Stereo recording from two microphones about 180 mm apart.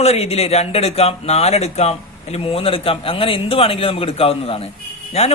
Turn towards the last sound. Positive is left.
turn(degrees=35)  # may be behind; listen again after turning